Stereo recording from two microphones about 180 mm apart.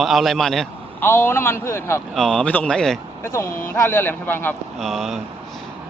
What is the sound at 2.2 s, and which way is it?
Speech, 5° left (ahead or behind).